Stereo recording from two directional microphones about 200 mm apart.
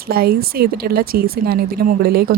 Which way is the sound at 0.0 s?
50° right (ahead or behind).